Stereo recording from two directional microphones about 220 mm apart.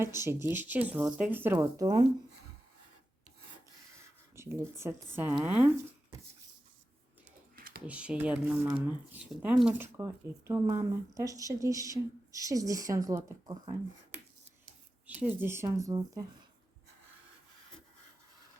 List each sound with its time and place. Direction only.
0.0 s speech: 10° right (ahead or behind)
4.4 s speech: 10° right (ahead or behind)
7.5 s typing: 40° right (ahead or behind)
7.9 s speech: 5° right (ahead or behind)